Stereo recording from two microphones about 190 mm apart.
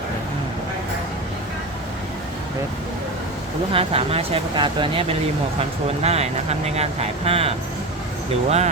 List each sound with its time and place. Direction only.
3.7 s speech: 30° right (ahead or behind)